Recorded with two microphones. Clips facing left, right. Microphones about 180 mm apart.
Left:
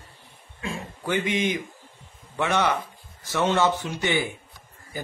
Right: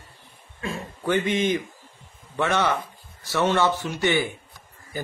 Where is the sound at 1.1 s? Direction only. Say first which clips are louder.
Right 3 dB; 15° left (ahead or behind).